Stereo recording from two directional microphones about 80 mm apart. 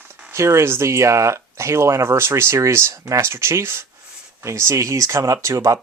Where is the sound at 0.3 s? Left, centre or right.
Right.